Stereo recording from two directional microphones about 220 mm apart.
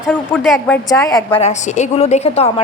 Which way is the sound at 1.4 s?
30° left (ahead or behind).